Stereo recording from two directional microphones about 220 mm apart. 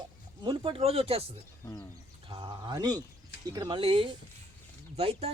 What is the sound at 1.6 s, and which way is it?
Speech, 15° left (ahead or behind).